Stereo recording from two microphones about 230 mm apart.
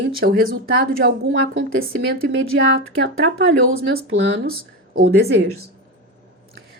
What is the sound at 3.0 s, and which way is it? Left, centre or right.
A woman's voice, right.